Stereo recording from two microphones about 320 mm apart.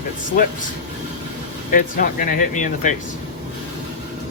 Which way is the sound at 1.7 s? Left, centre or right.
Left.